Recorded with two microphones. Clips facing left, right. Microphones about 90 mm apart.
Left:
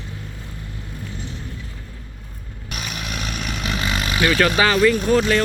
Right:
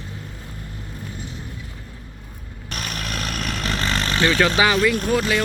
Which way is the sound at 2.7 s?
5° left (ahead or behind).